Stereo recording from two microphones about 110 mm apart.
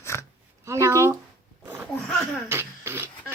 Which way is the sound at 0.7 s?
25° right (ahead or behind).